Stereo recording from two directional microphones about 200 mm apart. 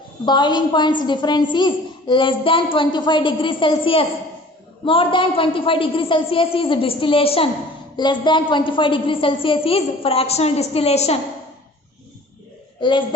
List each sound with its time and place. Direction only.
0.3 s a woman's voice: 20° left (ahead or behind)
12.8 s a woman's voice: 25° left (ahead or behind)